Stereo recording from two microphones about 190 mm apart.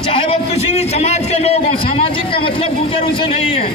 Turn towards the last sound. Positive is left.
turn(degrees=30)  # may be behind; listen again after turning